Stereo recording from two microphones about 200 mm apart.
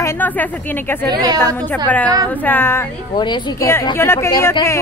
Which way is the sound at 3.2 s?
20° left (ahead or behind).